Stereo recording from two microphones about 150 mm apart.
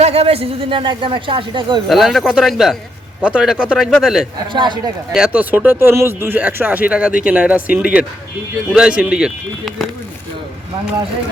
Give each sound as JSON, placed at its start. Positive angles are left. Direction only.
{"t": 0.0, "sound": "speech", "side_deg": -40}
{"t": 1.9, "sound": "speech", "side_deg": 0}
{"t": 4.5, "sound": "speech", "side_deg": -30}
{"t": 5.1, "sound": "speech", "side_deg": -5}